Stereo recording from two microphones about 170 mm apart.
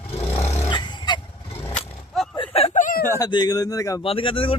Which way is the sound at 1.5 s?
15° left (ahead or behind).